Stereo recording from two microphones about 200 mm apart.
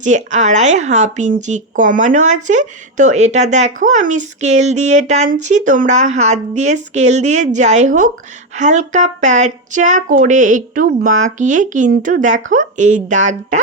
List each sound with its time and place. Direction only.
0.0 s speech: 35° right (ahead or behind)